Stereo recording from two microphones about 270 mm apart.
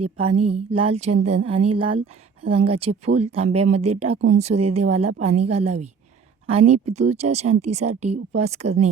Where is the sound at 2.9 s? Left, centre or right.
Right.